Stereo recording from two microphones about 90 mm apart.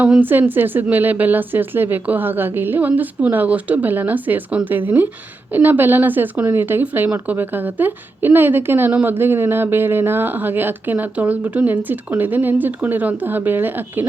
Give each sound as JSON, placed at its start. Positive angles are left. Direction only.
{"t": 0.0, "sound": "speech", "side_deg": -20}